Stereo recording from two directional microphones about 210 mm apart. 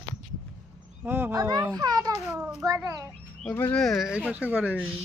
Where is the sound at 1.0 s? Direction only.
10° right (ahead or behind).